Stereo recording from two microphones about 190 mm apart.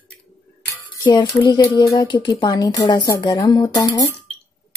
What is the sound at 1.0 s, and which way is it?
A woman's voice, 25° left (ahead or behind).